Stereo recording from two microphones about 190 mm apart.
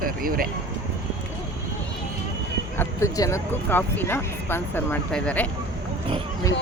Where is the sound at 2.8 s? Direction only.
15° left (ahead or behind).